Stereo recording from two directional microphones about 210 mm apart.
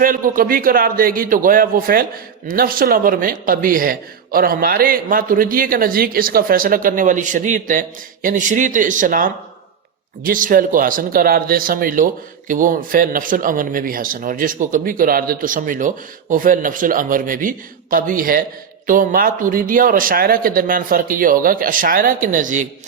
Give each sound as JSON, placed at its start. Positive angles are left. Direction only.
{"t": 0.0, "sound": "a man's voice", "side_deg": -40}